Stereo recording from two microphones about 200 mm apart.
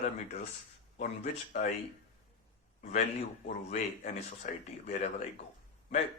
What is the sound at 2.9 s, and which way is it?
Speech, 35° left (ahead or behind).